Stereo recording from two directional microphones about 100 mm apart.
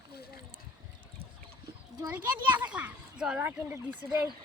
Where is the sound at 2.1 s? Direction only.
15° right (ahead or behind).